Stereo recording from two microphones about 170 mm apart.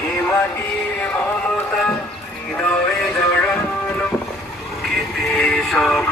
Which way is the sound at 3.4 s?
5° left (ahead or behind).